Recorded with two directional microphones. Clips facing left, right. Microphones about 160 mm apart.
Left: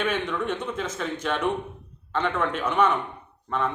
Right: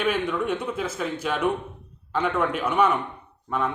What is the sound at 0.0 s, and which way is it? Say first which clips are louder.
Speech: right 2 dB; 10° right (ahead or behind).